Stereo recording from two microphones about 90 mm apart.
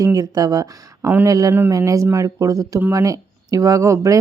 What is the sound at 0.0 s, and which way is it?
Speech, 40° right (ahead or behind).